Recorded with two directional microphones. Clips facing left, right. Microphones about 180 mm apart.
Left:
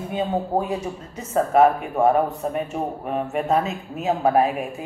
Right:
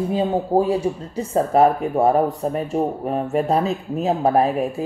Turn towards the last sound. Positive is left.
turn(degrees=-35)  # may be behind; listen again after turning